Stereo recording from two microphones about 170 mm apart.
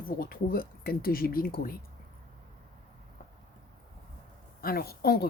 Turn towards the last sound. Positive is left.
turn(degrees=65)  # may be behind; listen again after turning